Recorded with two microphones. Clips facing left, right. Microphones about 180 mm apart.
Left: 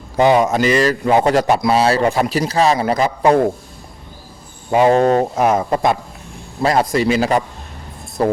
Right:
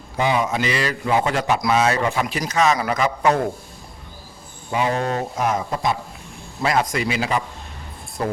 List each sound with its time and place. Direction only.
0.3 s a man's voice: 45° left (ahead or behind)
4.9 s speech: 50° left (ahead or behind)
6.6 s a man's voice: 35° left (ahead or behind)